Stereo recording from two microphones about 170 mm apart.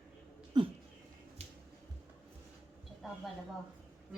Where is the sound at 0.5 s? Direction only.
25° right (ahead or behind).